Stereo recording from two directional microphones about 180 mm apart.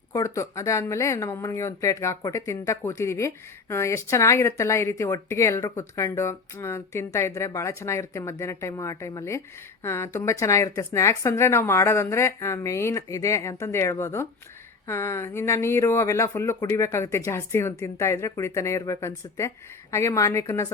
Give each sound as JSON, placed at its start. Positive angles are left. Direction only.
{"t": 0.1, "sound": "speech", "side_deg": 15}